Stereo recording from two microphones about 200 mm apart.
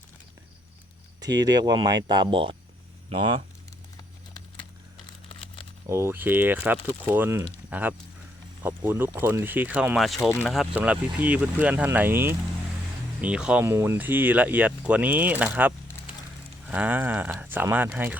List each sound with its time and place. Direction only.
1.4 s speech: 20° right (ahead or behind)
5.3 s crumpling: 25° left (ahead or behind)
5.9 s speech: 15° right (ahead or behind)